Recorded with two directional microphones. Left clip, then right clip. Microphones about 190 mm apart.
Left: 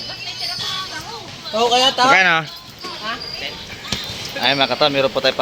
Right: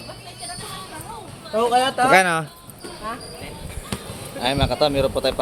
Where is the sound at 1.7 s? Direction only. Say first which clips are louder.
Left 4 dB; 55° left (ahead or behind).